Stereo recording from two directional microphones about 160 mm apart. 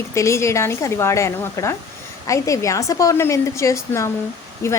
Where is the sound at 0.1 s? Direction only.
20° left (ahead or behind).